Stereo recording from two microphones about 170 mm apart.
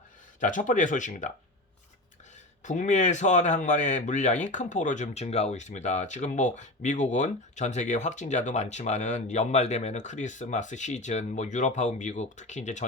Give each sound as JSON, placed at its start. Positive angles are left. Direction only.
{"t": 0.3, "sound": "speech", "side_deg": 50}
{"t": 2.6, "sound": "speech", "side_deg": 45}